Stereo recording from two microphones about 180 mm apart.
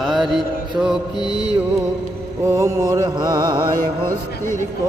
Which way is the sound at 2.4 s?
15° right (ahead or behind).